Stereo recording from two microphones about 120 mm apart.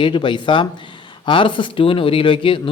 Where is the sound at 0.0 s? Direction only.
45° left (ahead or behind).